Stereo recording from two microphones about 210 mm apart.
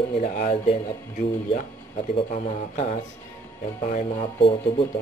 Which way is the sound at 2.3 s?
35° left (ahead or behind).